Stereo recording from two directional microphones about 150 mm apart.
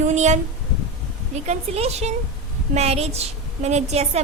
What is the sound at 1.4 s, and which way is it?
A woman's voice, 45° right (ahead or behind).